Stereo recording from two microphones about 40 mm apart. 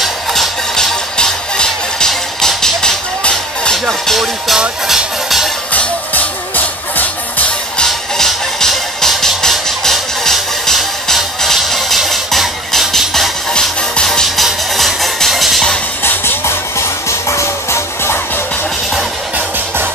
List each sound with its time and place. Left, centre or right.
1.1 s music: centre
4.8 s music: centre
5.7 s music: left
8.3 s music: centre
13.5 s music: centre
14.2 s music: centre
16.0 s music: left